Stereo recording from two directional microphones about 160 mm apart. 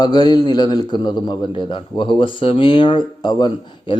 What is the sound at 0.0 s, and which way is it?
A man's voice, 25° left (ahead or behind).